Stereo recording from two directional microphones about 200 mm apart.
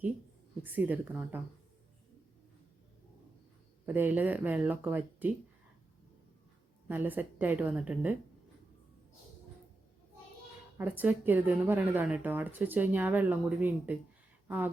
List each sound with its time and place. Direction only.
0.6 s a woman's voice: 10° right (ahead or behind)
3.8 s speech: 10° right (ahead or behind)
6.8 s speech: 10° right (ahead or behind)
10.8 s speech: 10° right (ahead or behind)